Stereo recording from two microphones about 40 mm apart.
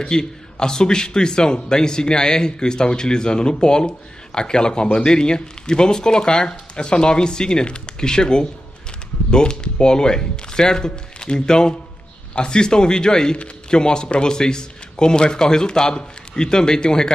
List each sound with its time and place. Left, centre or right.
0.0 s a man's voice: centre